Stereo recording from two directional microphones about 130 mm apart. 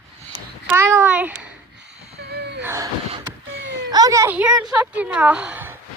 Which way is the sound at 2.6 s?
25° right (ahead or behind).